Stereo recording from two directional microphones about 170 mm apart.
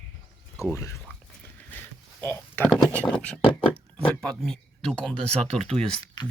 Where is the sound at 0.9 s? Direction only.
5° left (ahead or behind).